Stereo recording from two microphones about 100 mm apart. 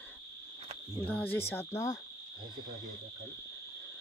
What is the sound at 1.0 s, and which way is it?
Cricket, 15° left (ahead or behind).